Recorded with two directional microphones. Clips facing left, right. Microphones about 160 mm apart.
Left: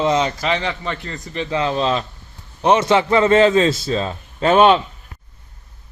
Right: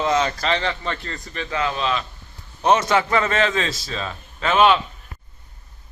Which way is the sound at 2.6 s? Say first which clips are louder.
Left 3 dB; 20° left (ahead or behind).